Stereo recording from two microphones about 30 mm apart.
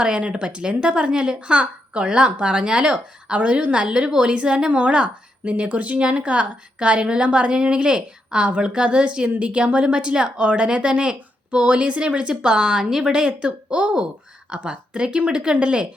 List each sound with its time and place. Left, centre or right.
0.0 s a woman's voice: right
0.4 s a woman's voice: right
3.3 s a woman's voice: right
3.8 s a woman's voice: right
4.7 s a woman's voice: right
5.6 s a woman's voice: right
8.4 s a woman's voice: right
8.7 s a woman's voice: right
12.3 s a woman's voice: right